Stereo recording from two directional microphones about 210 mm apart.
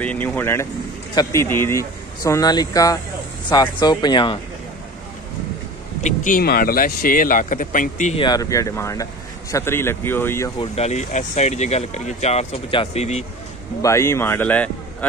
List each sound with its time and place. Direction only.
0.0 s speech: 5° left (ahead or behind); by 4.4 s 20° left (ahead or behind)
6.0 s speech: 40° left (ahead or behind)
8.2 s speech: 20° left (ahead or behind)
10.6 s speech: 30° left (ahead or behind)
13.8 s speech: 15° left (ahead or behind)